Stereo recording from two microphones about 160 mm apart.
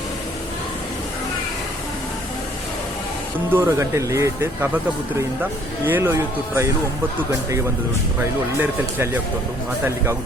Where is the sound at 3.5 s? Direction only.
15° right (ahead or behind).